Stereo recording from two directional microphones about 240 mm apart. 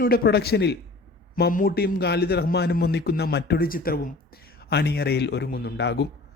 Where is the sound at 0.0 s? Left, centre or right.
Left.